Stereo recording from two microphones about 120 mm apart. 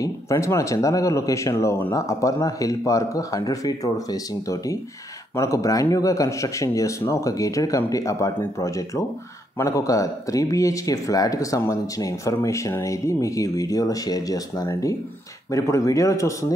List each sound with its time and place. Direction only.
0.0 s speech: 25° left (ahead or behind)